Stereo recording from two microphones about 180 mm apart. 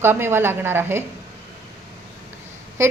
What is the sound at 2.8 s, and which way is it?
Speech, 15° right (ahead or behind).